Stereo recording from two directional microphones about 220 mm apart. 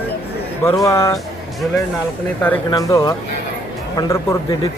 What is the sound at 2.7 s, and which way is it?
Speech, 15° left (ahead or behind).